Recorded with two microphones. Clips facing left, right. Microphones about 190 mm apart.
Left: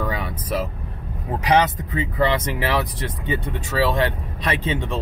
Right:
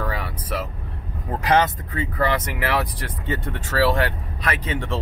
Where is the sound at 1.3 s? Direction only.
15° left (ahead or behind).